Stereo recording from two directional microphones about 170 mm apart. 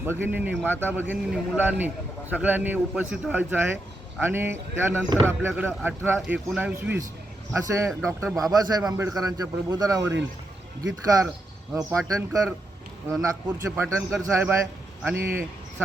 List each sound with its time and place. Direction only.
0.0 s a man's voice: 15° right (ahead or behind)
13.2 s speech: 15° right (ahead or behind)